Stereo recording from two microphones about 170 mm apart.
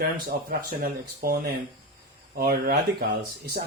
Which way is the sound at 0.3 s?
55° right (ahead or behind).